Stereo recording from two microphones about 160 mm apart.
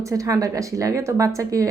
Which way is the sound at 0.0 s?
20° right (ahead or behind).